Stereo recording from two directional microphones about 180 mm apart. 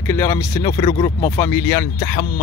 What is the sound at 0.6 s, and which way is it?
Speech, 30° left (ahead or behind).